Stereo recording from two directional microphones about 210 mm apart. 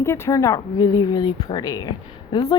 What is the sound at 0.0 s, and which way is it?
Speech, 10° left (ahead or behind).